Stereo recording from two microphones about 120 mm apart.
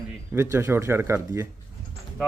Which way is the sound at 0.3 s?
20° right (ahead or behind).